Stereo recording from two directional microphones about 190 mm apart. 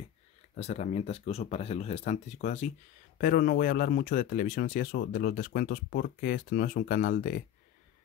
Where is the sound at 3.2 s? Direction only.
50° left (ahead or behind).